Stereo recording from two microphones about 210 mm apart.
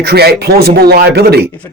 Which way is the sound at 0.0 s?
50° right (ahead or behind).